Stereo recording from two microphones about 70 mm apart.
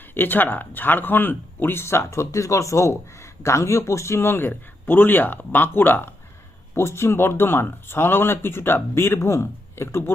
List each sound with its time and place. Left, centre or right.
0.1 s speech: left